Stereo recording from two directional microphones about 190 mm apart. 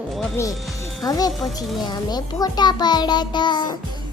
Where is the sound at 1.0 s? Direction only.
20° left (ahead or behind).